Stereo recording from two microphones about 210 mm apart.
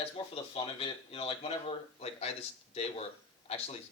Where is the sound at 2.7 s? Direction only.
30° left (ahead or behind).